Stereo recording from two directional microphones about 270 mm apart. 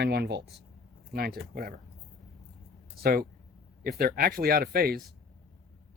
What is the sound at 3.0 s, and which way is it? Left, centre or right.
Speech, right.